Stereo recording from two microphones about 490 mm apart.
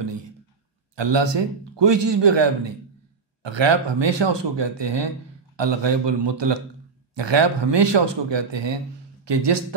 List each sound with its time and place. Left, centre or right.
0.9 s a man's voice: right